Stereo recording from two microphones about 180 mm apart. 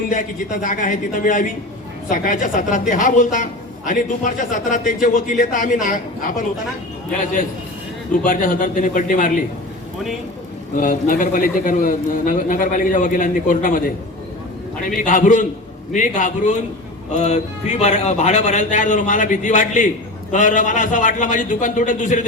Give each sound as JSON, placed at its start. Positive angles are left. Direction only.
{"t": 0.1, "sound": "speech", "side_deg": 45}
{"t": 8.2, "sound": "speech", "side_deg": 50}
{"t": 10.8, "sound": "a man's voice", "side_deg": 50}